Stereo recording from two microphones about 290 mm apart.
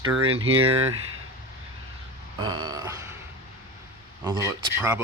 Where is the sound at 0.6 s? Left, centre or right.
Right.